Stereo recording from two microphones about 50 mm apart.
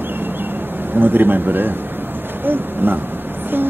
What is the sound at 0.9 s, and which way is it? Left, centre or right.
Speech, right.